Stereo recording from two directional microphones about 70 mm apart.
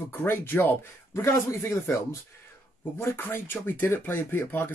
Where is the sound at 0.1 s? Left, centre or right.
Left.